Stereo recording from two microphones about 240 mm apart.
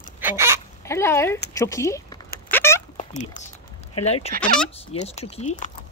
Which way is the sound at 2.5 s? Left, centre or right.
Centre.